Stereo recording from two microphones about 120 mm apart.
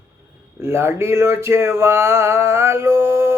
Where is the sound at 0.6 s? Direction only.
20° right (ahead or behind).